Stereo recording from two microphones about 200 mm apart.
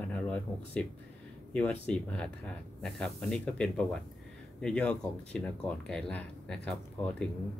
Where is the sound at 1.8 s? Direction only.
5° left (ahead or behind).